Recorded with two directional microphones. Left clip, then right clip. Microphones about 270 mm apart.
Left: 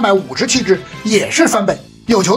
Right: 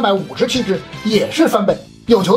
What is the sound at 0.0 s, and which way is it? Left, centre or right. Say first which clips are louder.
Speech: left 2 dB; left.